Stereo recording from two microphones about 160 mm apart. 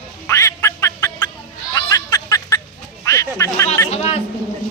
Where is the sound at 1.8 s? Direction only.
20° left (ahead or behind).